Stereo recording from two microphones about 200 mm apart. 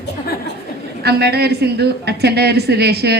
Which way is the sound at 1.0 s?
55° right (ahead or behind).